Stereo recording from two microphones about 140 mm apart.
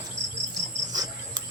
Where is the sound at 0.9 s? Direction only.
25° right (ahead or behind).